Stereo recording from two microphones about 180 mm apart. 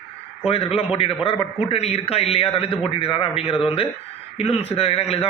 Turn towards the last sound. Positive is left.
turn(degrees=35)  # may be behind; listen again after turning